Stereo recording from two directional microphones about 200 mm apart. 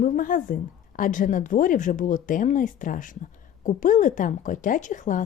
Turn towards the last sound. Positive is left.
turn(degrees=40)  # may be behind; listen again after turning